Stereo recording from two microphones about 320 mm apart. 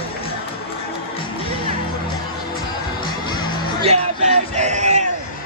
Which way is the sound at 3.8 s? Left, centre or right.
Centre.